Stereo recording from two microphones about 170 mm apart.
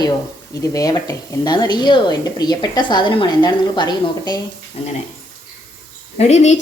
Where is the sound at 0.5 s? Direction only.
20° left (ahead or behind).